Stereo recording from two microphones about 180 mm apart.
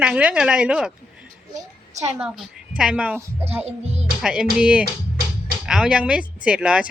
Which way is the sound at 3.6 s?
35° right (ahead or behind).